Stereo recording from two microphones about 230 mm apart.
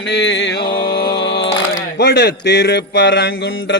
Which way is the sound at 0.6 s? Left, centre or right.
Centre.